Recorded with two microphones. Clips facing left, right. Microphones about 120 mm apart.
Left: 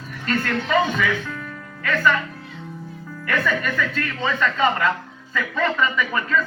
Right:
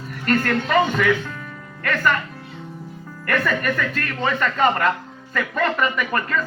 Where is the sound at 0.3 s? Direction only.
50° right (ahead or behind).